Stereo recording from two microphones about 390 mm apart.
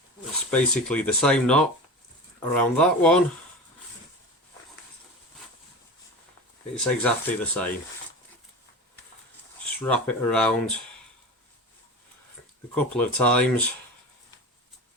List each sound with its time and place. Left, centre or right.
0.5 s speech: centre
6.7 s speech: centre
9.8 s speech: centre
12.7 s speech: centre